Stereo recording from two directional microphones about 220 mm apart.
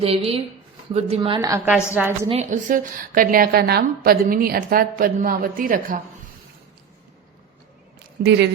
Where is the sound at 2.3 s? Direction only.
30° right (ahead or behind).